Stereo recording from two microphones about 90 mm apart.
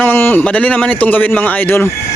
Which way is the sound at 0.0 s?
20° left (ahead or behind).